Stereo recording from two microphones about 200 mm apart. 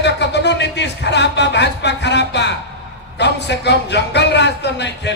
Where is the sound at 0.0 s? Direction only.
60° left (ahead or behind).